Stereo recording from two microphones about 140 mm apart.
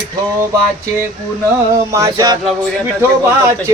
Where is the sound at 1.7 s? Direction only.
25° right (ahead or behind).